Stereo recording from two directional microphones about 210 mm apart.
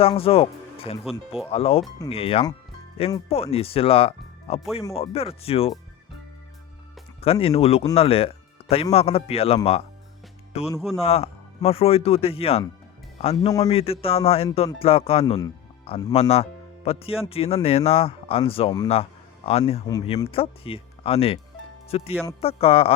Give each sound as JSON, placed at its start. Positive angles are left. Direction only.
{"t": 0.0, "sound": "speech", "side_deg": 25}
{"t": 1.0, "sound": "speech", "side_deg": 0}
{"t": 1.5, "sound": "speech", "side_deg": 30}
{"t": 7.2, "sound": "speech", "side_deg": 25}
{"t": 10.8, "sound": "speech", "side_deg": 0}
{"t": 11.0, "sound": "speech", "side_deg": 30}